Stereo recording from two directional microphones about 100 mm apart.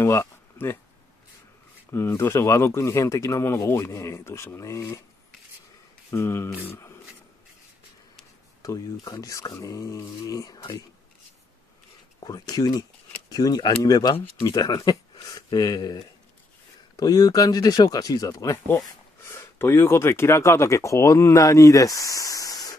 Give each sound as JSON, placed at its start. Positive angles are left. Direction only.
{"t": 0.0, "sound": "a sound", "side_deg": 25}
{"t": 1.9, "sound": "speech", "side_deg": 25}
{"t": 6.0, "sound": "speech", "side_deg": 25}
{"t": 8.6, "sound": "speech", "side_deg": 40}
{"t": 12.2, "sound": "speech", "side_deg": 40}